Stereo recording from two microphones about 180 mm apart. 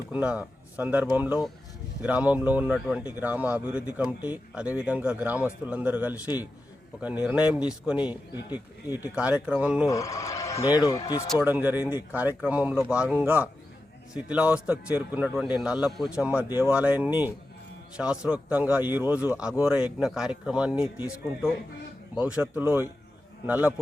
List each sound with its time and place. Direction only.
0.1 s speech: 5° right (ahead or behind)
9.8 s speech: 20° left (ahead or behind)
11.3 s speech: 10° right (ahead or behind)
22.1 s speech: 5° right (ahead or behind)